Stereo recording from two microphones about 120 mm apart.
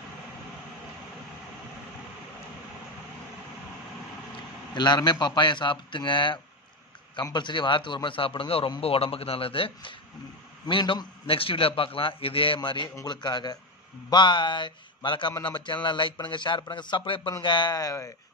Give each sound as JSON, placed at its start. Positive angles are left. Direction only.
{"t": 4.7, "sound": "a man's voice", "side_deg": 35}